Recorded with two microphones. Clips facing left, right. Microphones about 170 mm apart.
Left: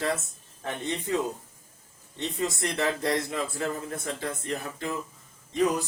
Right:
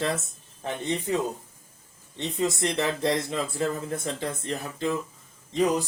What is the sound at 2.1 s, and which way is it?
Speech, 20° right (ahead or behind).